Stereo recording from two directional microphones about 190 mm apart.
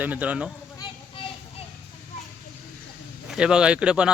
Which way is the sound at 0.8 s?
25° left (ahead or behind).